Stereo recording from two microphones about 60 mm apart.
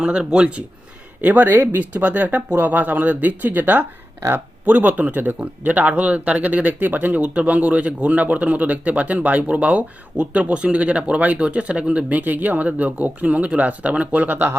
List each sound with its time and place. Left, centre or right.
0.0 s speech: centre
1.5 s speech: right
1.7 s speech: right